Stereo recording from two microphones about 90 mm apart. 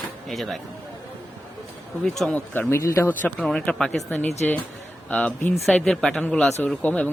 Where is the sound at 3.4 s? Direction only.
10° left (ahead or behind).